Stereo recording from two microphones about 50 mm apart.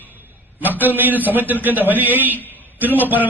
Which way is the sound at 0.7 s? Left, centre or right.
Right.